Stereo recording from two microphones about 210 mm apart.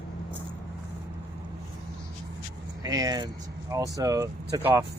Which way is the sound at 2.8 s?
15° right (ahead or behind).